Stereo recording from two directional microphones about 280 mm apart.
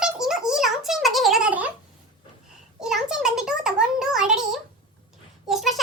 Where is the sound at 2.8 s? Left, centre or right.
Centre.